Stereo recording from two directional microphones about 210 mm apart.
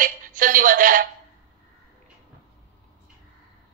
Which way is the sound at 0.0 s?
40° right (ahead or behind).